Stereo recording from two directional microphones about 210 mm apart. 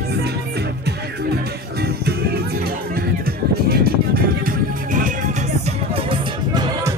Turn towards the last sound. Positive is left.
turn(degrees=-20)  # may be behind; listen again after turning